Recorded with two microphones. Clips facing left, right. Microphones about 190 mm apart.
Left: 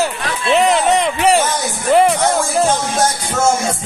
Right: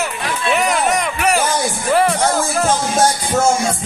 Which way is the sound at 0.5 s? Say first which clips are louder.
Left 5 dB; 25° left (ahead or behind).